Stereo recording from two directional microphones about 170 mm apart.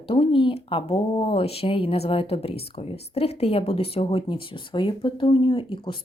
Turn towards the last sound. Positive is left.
turn(degrees=30)  # may be behind; listen again after turning